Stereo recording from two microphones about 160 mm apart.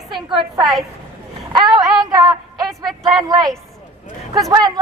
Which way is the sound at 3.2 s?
25° right (ahead or behind).